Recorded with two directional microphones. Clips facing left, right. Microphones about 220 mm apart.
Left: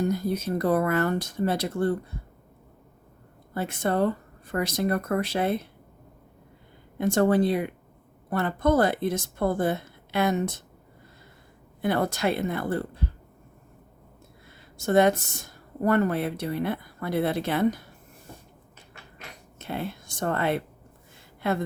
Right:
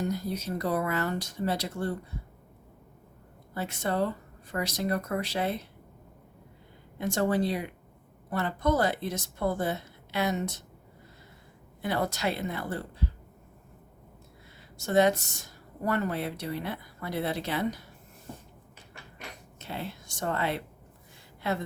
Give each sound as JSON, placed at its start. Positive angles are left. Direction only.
{"t": 0.0, "sound": "speech", "side_deg": 50}
{"t": 3.5, "sound": "speech", "side_deg": 55}
{"t": 7.0, "sound": "speech", "side_deg": 55}
{"t": 11.8, "sound": "speech", "side_deg": 55}
{"t": 14.8, "sound": "speech", "side_deg": 55}
{"t": 19.5, "sound": "speech", "side_deg": 55}